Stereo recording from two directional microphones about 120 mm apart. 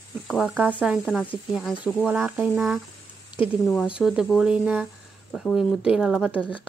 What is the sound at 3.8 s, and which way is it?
Speech, 5° right (ahead or behind).